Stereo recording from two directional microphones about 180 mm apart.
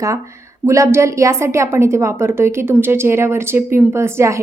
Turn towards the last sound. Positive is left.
turn(degrees=-15)  # may be behind; listen again after turning